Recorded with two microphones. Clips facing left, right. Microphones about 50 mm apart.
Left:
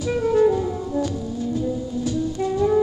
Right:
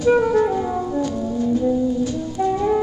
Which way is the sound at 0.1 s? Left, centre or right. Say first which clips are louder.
Right 1 dB; right.